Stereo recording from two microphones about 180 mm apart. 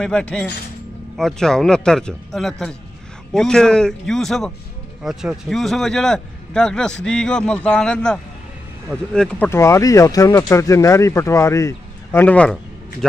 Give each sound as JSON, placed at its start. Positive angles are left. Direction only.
{"t": 0.0, "sound": "a man's voice", "side_deg": 5}